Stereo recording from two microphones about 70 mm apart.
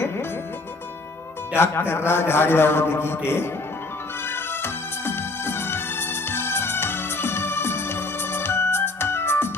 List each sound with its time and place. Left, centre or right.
1.5 s a man's voice: left
4.3 s music: left